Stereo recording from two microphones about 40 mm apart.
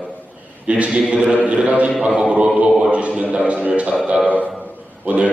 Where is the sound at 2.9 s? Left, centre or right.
Right.